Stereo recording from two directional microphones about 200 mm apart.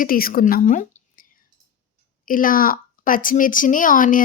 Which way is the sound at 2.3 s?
45° left (ahead or behind).